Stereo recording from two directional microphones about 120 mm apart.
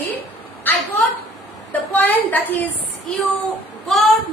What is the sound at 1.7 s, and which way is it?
Speech, 15° left (ahead or behind).